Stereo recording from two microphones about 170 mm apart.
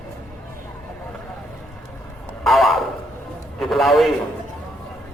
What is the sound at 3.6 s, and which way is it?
Speech, centre (ahead or behind).